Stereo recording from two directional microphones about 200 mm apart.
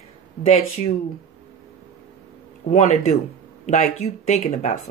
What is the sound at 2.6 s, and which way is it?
Speech, 35° left (ahead or behind).